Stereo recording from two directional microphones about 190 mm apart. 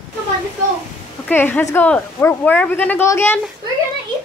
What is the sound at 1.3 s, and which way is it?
Speech, 10° left (ahead or behind).